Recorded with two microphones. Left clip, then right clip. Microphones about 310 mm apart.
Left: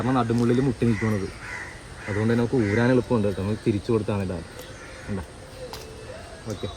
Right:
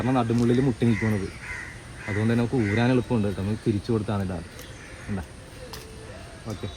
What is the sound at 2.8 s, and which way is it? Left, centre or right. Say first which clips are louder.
Speech: left 3 dB; centre.